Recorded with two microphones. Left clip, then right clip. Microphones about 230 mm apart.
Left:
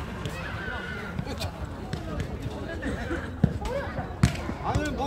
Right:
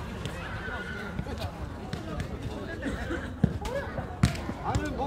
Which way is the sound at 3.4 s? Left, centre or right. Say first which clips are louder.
Left 2 dB; centre.